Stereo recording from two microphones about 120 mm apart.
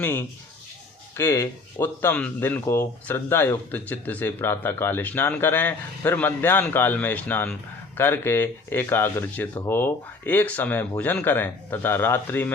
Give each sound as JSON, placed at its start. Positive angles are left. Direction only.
{"t": 0.0, "sound": "speech", "side_deg": 20}